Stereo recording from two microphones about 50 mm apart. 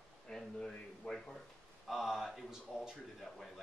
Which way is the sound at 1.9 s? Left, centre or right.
Centre.